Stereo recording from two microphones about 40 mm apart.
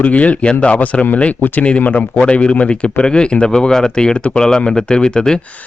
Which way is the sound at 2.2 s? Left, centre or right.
Left.